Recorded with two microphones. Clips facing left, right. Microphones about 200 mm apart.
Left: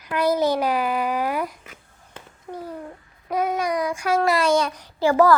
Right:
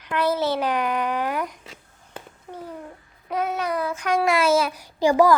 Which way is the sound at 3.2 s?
10° left (ahead or behind).